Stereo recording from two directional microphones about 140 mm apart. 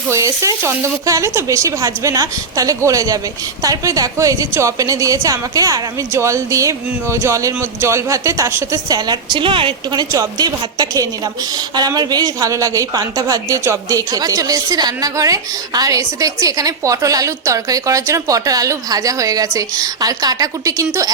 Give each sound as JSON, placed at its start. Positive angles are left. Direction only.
{"t": 0.1, "sound": "a woman's voice", "side_deg": -25}